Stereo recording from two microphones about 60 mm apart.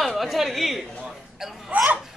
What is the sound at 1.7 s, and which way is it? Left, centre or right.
Speech, right.